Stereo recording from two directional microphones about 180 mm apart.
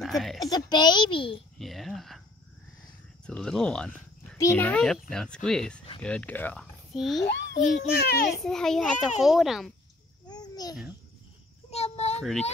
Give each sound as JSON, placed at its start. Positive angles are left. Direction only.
{"t": 0.0, "sound": "speech", "side_deg": 0}
{"t": 0.4, "sound": "a child's voice", "side_deg": 20}
{"t": 1.6, "sound": "speech", "side_deg": 0}
{"t": 3.3, "sound": "a child's voice", "side_deg": 5}
{"t": 7.9, "sound": "a child's voice", "side_deg": 60}
{"t": 8.4, "sound": "a child's voice", "side_deg": 0}
{"t": 10.2, "sound": "babbling", "side_deg": 20}
{"t": 11.7, "sound": "child singing", "side_deg": 35}
{"t": 12.2, "sound": "a child's voice", "side_deg": 5}